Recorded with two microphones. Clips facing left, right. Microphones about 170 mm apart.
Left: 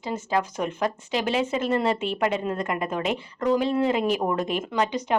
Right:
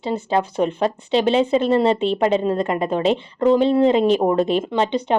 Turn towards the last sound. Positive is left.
turn(degrees=-30)  # may be behind; listen again after turning